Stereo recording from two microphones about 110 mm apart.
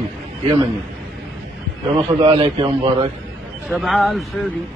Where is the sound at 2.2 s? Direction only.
50° right (ahead or behind).